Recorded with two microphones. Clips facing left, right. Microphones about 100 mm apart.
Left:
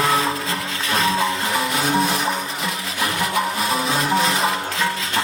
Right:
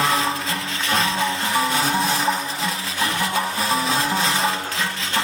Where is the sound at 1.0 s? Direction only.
30° left (ahead or behind).